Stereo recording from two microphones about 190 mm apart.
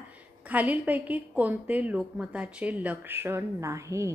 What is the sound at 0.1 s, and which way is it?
A woman's voice, 10° right (ahead or behind).